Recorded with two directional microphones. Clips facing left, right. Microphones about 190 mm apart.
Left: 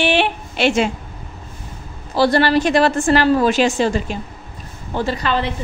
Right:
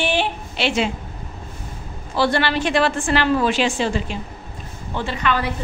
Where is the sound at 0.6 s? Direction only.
45° left (ahead or behind).